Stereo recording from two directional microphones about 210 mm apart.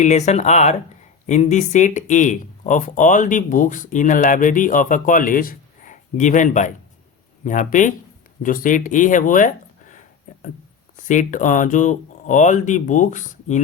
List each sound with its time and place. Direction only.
0.0 s speech: 35° left (ahead or behind)
10.9 s speech: 35° left (ahead or behind)